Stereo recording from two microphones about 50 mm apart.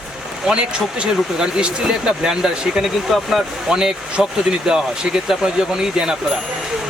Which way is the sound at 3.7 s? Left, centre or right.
Centre.